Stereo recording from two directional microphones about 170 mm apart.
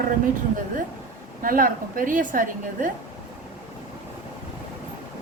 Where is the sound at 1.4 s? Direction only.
55° right (ahead or behind).